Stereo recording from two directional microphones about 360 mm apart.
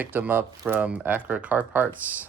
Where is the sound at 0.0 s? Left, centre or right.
Centre.